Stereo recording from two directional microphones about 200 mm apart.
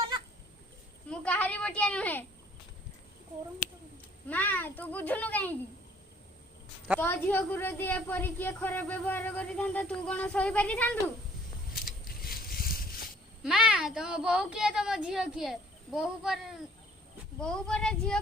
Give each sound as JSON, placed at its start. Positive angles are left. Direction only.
{"t": 1.1, "sound": "a sound", "side_deg": 5}
{"t": 3.6, "sound": "speech", "side_deg": 40}
{"t": 4.3, "sound": "speech", "side_deg": 10}
{"t": 7.0, "sound": "speech", "side_deg": 10}
{"t": 11.7, "sound": "a sound", "side_deg": 45}
{"t": 13.4, "sound": "speech", "side_deg": 0}